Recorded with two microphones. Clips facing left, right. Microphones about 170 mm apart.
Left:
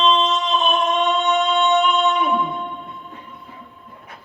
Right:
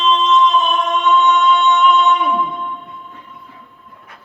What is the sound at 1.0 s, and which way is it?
Music, 45° left (ahead or behind).